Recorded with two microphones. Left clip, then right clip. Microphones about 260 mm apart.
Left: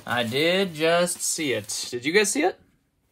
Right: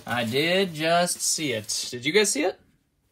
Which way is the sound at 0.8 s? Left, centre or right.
Left.